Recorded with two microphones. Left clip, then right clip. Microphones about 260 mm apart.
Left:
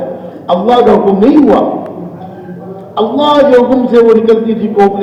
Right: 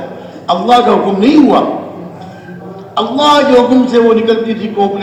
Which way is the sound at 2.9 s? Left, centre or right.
Right.